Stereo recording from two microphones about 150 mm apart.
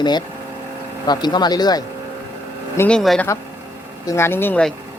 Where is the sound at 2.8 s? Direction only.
5° left (ahead or behind).